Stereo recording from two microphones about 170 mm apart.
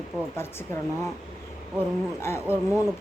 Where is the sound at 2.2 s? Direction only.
15° left (ahead or behind).